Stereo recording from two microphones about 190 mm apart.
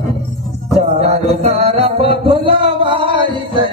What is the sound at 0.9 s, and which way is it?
Music, 35° right (ahead or behind).